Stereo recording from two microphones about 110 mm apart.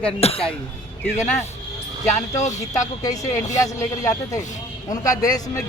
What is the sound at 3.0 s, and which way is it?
Speech, 35° left (ahead or behind).